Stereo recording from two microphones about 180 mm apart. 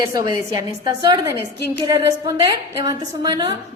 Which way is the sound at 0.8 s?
25° right (ahead or behind).